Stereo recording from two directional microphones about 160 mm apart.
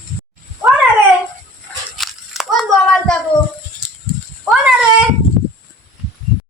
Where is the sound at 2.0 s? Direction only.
Centre (ahead or behind).